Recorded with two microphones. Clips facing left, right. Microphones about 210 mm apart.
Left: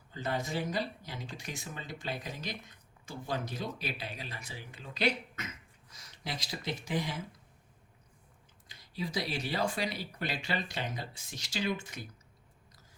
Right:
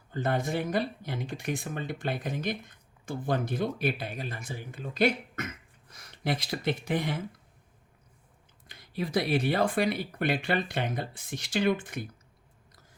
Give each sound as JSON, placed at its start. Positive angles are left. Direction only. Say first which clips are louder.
{"t": 0.1, "sound": "speech", "louder": "right 6 dB", "side_deg": -55}
{"t": 8.6, "sound": "speech", "louder": "right 5 dB", "side_deg": -60}